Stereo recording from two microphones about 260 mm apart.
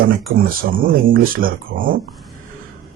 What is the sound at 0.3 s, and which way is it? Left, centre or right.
Speech, right.